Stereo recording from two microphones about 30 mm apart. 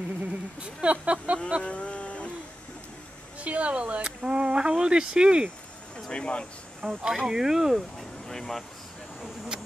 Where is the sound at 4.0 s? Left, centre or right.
Right.